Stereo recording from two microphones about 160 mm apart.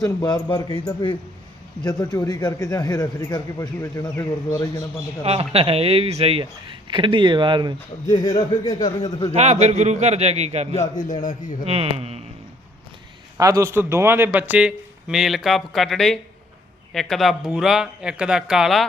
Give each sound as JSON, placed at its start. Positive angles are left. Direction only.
{"t": 0.0, "sound": "a man's voice", "side_deg": 25}
{"t": 5.2, "sound": "a man's voice", "side_deg": -40}
{"t": 8.0, "sound": "a man's voice", "side_deg": 25}
{"t": 9.3, "sound": "a man's voice", "side_deg": -45}
{"t": 10.9, "sound": "speech", "side_deg": 55}
{"t": 11.6, "sound": "speech", "side_deg": -40}
{"t": 13.3, "sound": "a man's voice", "side_deg": -20}